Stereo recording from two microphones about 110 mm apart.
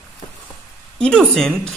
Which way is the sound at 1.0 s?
5° left (ahead or behind).